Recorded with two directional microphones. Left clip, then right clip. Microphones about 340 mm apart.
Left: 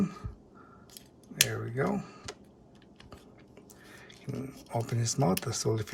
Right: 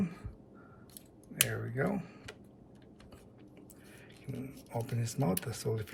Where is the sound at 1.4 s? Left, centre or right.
Centre.